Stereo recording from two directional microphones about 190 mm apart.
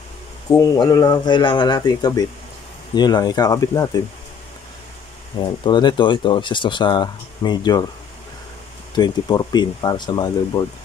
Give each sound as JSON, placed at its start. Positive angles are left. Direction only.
{"t": 0.5, "sound": "speech", "side_deg": 20}
{"t": 5.4, "sound": "speech", "side_deg": 25}
{"t": 8.9, "sound": "speech", "side_deg": 20}